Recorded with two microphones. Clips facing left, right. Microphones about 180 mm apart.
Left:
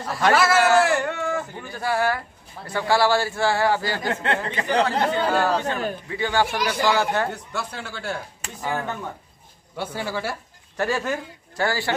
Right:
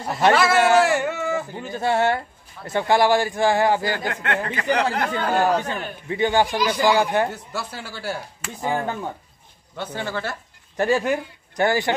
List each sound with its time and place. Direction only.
0.0 s a man's voice: 20° right (ahead or behind)
0.3 s speech: centre (ahead or behind)
0.6 s speech: 20° right (ahead or behind)
0.8 s speech: 5° right (ahead or behind)
1.5 s speech: 20° right (ahead or behind)
3.9 s speech: 30° left (ahead or behind)
5.3 s speech: 15° right (ahead or behind)
7.5 s speech: 5° right (ahead or behind)
9.8 s speech: 10° left (ahead or behind)
10.8 s speech: 15° right (ahead or behind)